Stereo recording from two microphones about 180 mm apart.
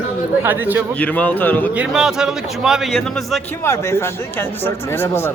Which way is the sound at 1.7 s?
5° right (ahead or behind).